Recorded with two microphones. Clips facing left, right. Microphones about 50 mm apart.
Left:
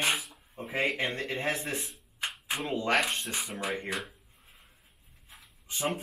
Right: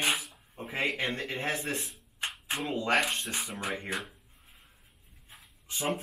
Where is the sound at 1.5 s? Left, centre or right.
Centre.